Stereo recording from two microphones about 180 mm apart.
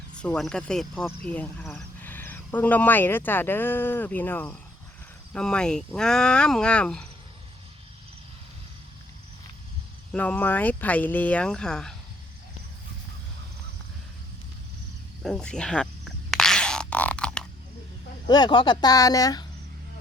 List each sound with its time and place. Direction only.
0.2 s speech: 5° left (ahead or behind)
10.1 s speech: 10° left (ahead or behind)
15.2 s a sound: 5° left (ahead or behind)
18.3 s speech: 25° left (ahead or behind)